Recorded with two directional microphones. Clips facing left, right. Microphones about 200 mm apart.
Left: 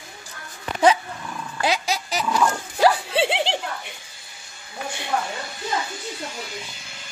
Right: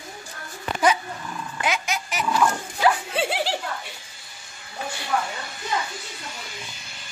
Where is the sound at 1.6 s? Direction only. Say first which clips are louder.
Left 3 dB; 35° left (ahead or behind).